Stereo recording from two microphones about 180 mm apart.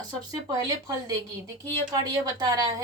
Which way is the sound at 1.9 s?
20° right (ahead or behind).